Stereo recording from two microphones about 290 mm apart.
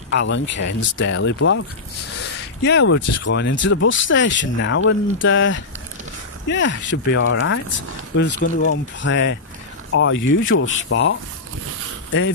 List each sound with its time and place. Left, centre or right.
0.1 s speech: left
2.6 s speech: left